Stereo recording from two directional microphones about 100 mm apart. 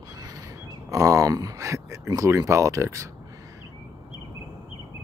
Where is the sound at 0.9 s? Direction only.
35° right (ahead or behind).